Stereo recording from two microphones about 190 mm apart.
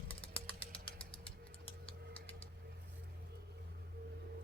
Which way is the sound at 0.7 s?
30° left (ahead or behind).